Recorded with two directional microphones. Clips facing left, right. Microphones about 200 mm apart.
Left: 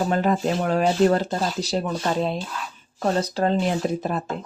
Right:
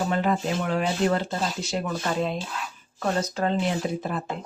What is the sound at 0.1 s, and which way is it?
Speech, 40° left (ahead or behind).